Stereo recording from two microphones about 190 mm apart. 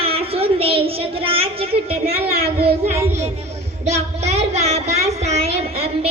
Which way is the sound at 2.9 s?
15° right (ahead or behind).